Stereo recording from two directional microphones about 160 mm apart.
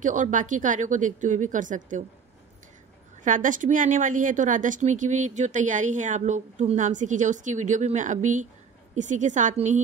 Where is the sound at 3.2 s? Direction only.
55° right (ahead or behind).